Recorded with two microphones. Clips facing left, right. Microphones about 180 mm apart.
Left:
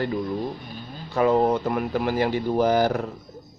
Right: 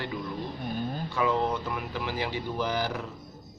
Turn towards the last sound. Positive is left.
turn(degrees=45)  # may be behind; listen again after turning